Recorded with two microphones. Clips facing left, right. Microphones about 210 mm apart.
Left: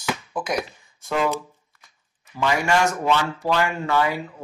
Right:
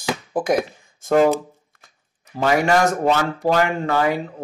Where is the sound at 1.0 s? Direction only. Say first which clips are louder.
Right 8 dB; 45° right (ahead or behind).